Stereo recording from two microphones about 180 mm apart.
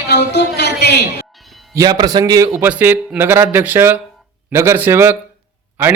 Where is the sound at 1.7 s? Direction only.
20° right (ahead or behind).